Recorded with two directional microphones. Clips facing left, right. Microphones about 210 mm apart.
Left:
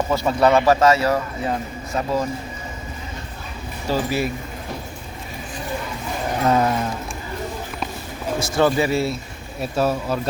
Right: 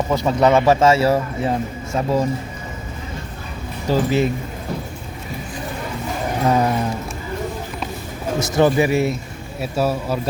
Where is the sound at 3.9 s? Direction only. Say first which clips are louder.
Right 4 dB; 20° right (ahead or behind).